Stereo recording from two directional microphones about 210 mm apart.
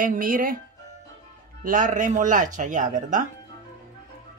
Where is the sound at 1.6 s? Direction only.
40° right (ahead or behind).